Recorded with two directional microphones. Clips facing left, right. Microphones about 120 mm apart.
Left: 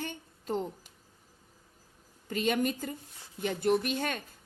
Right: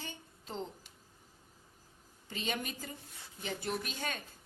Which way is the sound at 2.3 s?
50° left (ahead or behind).